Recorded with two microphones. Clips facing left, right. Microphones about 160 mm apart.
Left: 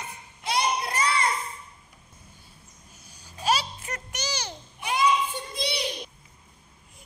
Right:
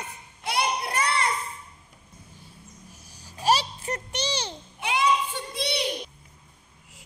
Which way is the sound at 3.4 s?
35° right (ahead or behind).